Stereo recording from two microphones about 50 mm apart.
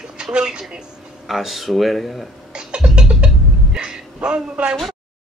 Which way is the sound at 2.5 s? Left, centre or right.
Centre.